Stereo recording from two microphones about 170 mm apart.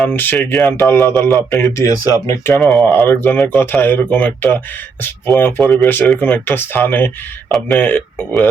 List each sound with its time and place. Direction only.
0.0 s speech: 10° left (ahead or behind)
2.6 s speech: centre (ahead or behind)